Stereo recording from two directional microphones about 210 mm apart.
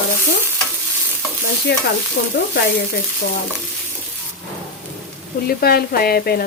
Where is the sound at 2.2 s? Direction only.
65° left (ahead or behind).